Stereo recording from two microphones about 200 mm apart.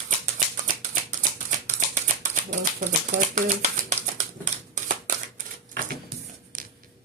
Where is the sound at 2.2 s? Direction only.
35° right (ahead or behind).